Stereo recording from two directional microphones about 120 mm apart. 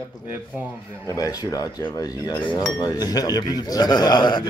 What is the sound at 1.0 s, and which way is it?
A man's voice, 30° left (ahead or behind).